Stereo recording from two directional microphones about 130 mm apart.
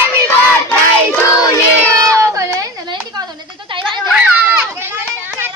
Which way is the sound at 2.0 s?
25° right (ahead or behind).